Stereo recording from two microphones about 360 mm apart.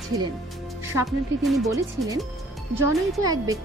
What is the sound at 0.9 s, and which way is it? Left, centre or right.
Speech, centre.